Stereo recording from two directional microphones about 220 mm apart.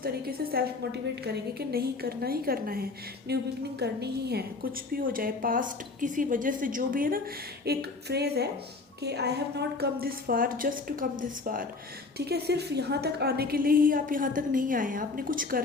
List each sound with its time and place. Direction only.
0.0 s a woman's voice: 45° right (ahead or behind)